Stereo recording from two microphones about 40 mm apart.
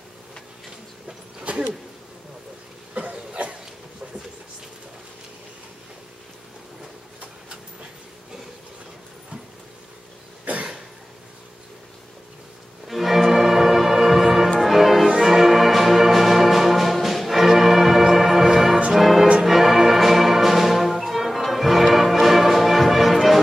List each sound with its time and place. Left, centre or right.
1.5 s a sound: right
2.9 s cough: right
12.8 s music: centre